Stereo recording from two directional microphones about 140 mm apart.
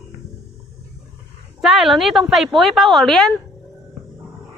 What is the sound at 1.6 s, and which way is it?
A woman's voice, 5° right (ahead or behind).